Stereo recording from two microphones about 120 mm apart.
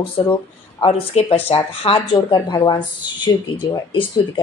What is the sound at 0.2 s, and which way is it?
Speech, 30° left (ahead or behind).